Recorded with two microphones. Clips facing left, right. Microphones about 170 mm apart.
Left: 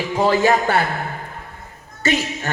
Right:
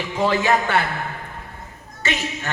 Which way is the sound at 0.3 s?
40° left (ahead or behind).